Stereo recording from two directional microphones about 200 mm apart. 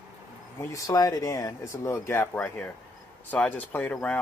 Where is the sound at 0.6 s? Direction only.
15° left (ahead or behind).